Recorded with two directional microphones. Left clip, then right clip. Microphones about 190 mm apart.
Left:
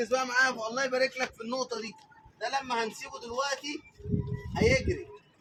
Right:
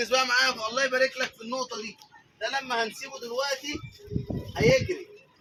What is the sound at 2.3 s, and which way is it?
Speech, centre (ahead or behind).